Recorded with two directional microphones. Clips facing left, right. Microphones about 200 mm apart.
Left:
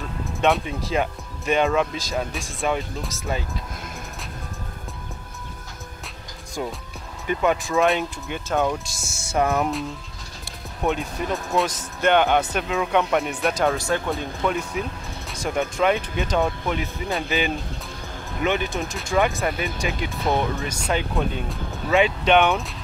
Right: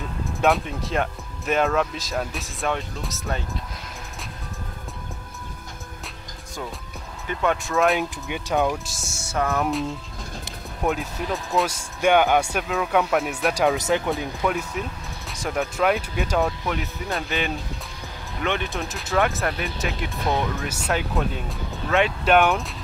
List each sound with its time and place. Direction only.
0.2 s speech: centre (ahead or behind)
7.2 s speech: 5° left (ahead or behind)
9.2 s music: 15° left (ahead or behind)
10.8 s speech: centre (ahead or behind)
13.7 s speech: 15° right (ahead or behind)
14.1 s speech: centre (ahead or behind)